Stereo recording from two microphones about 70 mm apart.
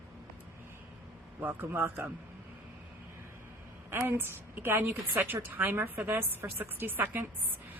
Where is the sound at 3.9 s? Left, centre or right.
Right.